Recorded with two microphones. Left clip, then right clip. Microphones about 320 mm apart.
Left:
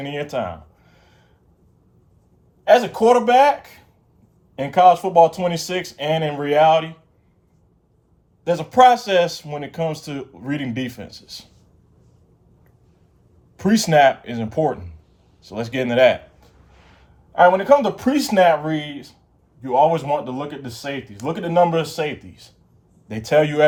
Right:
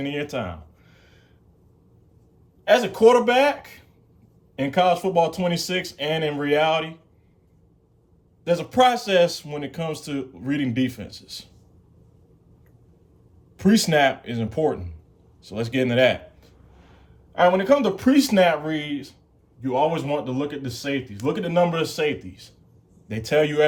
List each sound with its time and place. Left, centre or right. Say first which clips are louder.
0.0 s a sound: left 3 dB; centre
2.6 s speech: left 2 dB; centre
8.4 s speech: left 5 dB; centre
13.6 s speech: left 4 dB; centre